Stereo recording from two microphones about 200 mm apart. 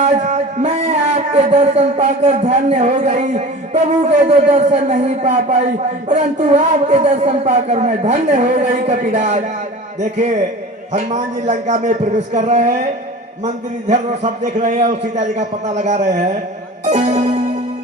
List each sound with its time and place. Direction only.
0.0 s speech: 35° right (ahead or behind)
16.8 s music: 35° right (ahead or behind)